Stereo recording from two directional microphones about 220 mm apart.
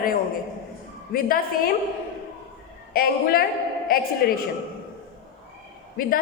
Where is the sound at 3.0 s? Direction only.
40° left (ahead or behind).